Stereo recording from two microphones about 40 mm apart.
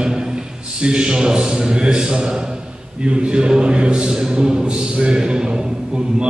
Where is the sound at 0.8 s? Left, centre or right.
Right.